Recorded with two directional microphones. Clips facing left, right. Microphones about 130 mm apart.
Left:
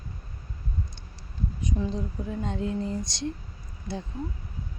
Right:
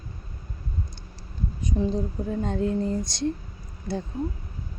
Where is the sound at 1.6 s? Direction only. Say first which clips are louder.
Right 5 dB; 35° right (ahead or behind).